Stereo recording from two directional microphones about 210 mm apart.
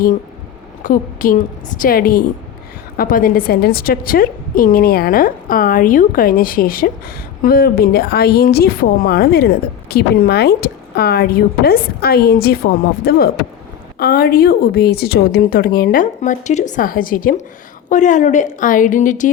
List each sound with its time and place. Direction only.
0.8 s a woman's voice: 40° left (ahead or behind)